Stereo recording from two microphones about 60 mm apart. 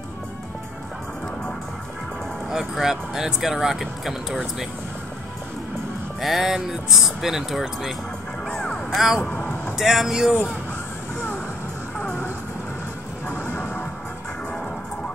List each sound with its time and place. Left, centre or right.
2.5 s speech: centre
6.2 s speech: centre
8.5 s music: centre
8.9 s speech: centre
9.3 s vehicle: left
9.8 s speech: centre
12.0 s music: left
13.4 s music: left